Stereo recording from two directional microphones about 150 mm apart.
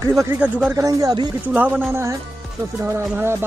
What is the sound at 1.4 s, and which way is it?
Speech, 10° right (ahead or behind).